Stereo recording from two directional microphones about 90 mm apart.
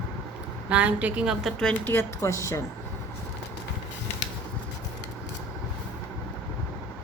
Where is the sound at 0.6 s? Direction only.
15° right (ahead or behind).